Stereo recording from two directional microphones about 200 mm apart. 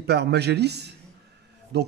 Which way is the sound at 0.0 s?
55° right (ahead or behind).